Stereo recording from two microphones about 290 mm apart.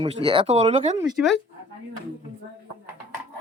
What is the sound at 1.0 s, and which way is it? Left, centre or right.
Speech, centre.